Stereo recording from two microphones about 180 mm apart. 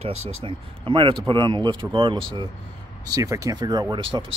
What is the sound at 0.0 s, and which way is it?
Speech, 30° right (ahead or behind).